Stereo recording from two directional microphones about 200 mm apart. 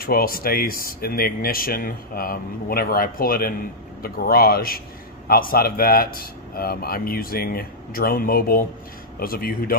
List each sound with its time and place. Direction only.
0.0 s speech: 50° left (ahead or behind)